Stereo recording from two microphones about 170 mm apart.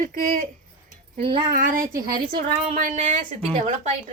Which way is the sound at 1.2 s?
30° right (ahead or behind).